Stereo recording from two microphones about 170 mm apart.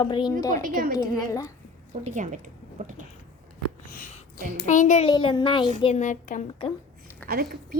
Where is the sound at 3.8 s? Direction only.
55° left (ahead or behind).